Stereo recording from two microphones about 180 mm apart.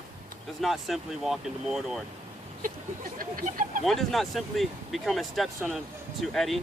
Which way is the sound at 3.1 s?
50° right (ahead or behind).